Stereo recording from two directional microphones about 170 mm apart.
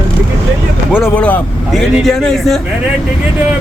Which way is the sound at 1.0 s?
10° left (ahead or behind).